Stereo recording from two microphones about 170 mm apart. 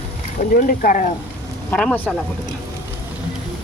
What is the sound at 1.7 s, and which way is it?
Speech, 5° left (ahead or behind).